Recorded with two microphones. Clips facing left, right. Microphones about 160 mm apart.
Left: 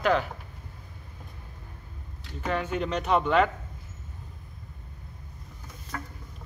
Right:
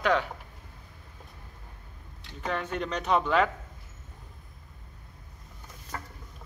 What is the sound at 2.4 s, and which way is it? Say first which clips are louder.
Speech: left 3 dB; 5° left (ahead or behind).